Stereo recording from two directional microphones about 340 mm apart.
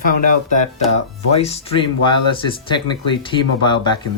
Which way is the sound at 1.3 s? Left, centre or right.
Centre.